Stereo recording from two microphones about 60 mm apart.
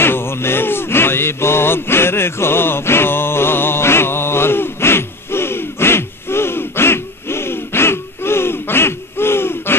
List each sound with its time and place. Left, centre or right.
0.0 s music: left